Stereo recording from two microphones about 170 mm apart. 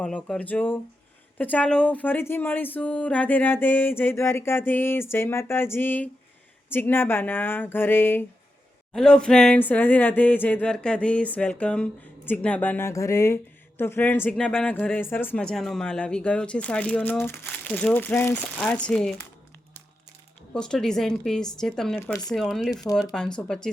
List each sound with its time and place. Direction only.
0.0 s speech: 5° left (ahead or behind)
20.5 s speech: 5° left (ahead or behind)
22.0 s speech: 20° left (ahead or behind)
22.3 s speech: centre (ahead or behind)